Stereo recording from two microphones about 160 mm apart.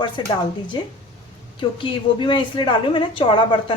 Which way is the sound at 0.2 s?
30° left (ahead or behind).